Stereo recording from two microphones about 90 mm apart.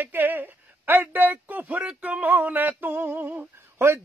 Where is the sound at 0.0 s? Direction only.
20° right (ahead or behind).